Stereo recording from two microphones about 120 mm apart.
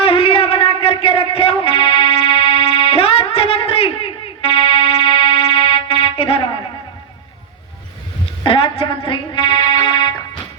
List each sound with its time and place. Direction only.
0.0 s music: 55° left (ahead or behind)
8.4 s music: 50° left (ahead or behind)